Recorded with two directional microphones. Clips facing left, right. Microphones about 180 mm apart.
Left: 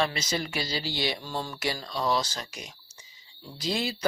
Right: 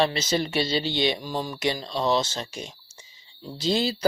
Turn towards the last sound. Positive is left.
turn(degrees=-30)  # may be behind; listen again after turning